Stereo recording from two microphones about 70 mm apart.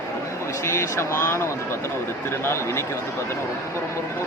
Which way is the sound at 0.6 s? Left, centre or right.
Left.